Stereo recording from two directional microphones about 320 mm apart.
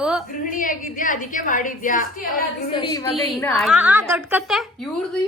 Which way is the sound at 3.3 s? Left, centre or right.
Centre.